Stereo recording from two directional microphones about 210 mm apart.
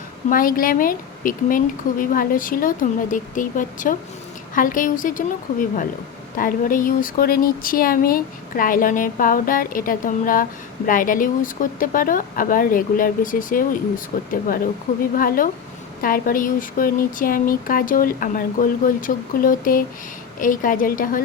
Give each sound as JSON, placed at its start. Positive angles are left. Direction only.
{"t": 0.3, "sound": "speech", "side_deg": 40}
{"t": 15.1, "sound": "speech", "side_deg": 40}